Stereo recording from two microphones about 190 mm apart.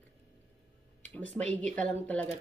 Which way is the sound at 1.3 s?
5° left (ahead or behind).